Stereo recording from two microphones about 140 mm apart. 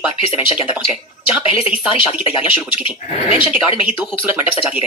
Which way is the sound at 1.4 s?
45° left (ahead or behind).